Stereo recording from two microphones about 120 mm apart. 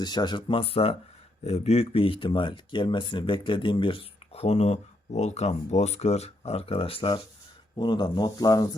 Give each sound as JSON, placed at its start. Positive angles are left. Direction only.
{"t": 0.0, "sound": "speech", "side_deg": 35}
{"t": 7.8, "sound": "speech", "side_deg": 35}